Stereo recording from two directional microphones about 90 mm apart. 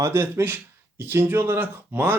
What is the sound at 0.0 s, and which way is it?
Speech, 25° right (ahead or behind).